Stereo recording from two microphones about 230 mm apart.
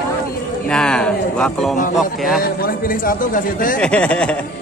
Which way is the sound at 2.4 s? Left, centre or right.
Left.